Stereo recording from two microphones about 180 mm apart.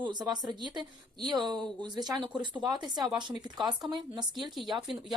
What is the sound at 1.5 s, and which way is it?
Speech, centre (ahead or behind).